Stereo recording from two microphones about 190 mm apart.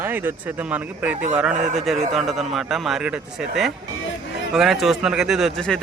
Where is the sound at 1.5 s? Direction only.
40° right (ahead or behind).